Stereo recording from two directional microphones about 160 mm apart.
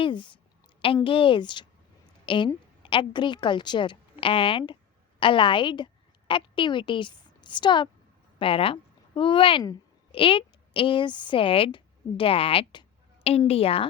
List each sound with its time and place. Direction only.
0.0 s a woman's voice: 30° left (ahead or behind)